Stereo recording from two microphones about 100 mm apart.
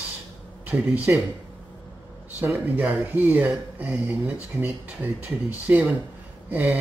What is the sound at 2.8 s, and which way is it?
Speech, 10° right (ahead or behind).